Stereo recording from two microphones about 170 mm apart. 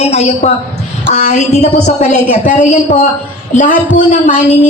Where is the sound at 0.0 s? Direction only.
40° left (ahead or behind).